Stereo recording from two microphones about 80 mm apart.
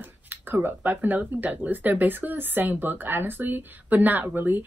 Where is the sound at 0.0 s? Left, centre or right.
Right.